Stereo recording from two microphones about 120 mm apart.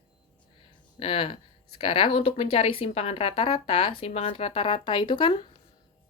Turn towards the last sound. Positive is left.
turn(degrees=40)  # may be behind; listen again after turning